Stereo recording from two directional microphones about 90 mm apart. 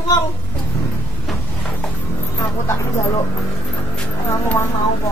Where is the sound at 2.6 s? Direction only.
35° left (ahead or behind).